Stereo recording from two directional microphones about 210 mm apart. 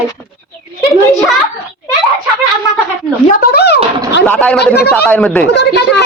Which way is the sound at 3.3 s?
45° left (ahead or behind).